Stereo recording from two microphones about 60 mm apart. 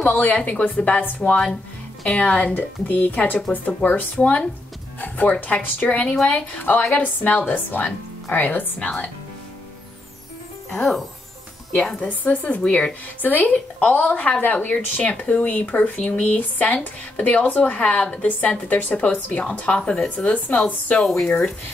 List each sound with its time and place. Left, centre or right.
0.0 s speech: left
8.7 s speech: centre
10.7 s speech: centre
12.3 s a woman's voice: left